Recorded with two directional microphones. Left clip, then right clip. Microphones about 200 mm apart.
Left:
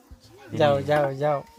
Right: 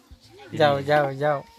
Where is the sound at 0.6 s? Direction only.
15° right (ahead or behind).